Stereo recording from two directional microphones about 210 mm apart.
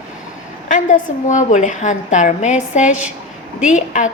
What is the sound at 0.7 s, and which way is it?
A woman's voice, 35° left (ahead or behind).